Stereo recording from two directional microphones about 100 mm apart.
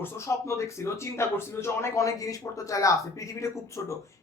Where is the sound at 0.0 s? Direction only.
30° left (ahead or behind).